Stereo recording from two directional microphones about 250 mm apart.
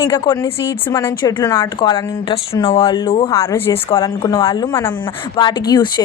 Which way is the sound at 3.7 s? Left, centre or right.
Left.